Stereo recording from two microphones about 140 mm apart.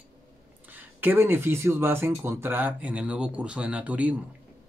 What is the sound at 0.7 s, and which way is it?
A man's voice, 15° right (ahead or behind).